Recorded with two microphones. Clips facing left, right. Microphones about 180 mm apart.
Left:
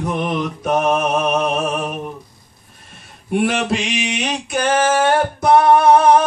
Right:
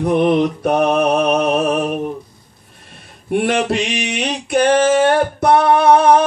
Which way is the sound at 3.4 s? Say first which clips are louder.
Right 1 dB; 60° right (ahead or behind).